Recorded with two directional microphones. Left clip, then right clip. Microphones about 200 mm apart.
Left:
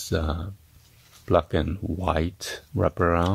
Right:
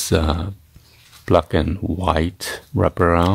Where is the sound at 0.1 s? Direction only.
10° right (ahead or behind).